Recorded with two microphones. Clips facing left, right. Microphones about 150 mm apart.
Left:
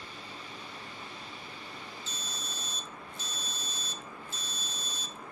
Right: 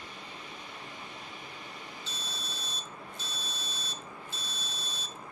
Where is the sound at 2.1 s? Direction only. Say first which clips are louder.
Even; 45° left (ahead or behind).